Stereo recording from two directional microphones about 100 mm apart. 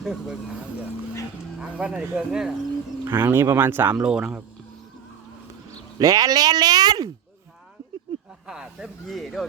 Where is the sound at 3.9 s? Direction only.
10° right (ahead or behind).